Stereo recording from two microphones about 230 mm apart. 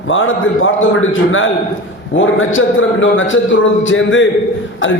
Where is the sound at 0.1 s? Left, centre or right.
Left.